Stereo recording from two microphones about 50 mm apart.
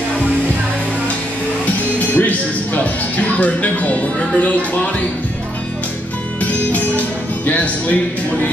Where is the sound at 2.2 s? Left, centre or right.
Left.